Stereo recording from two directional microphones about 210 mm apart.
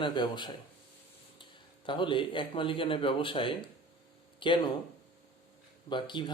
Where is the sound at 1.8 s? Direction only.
25° left (ahead or behind).